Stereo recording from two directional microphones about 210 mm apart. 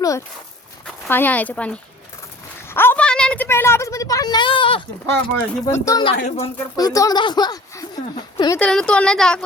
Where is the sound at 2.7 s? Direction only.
10° left (ahead or behind).